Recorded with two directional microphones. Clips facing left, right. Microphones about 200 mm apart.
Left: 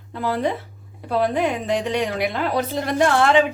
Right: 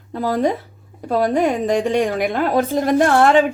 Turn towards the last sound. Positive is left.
turn(degrees=-45)  # may be behind; listen again after turning